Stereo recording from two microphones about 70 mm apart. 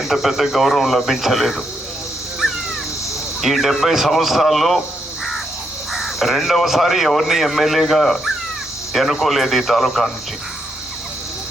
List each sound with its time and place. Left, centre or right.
0.0 s speech: centre
3.4 s speech: centre
5.9 s speech: centre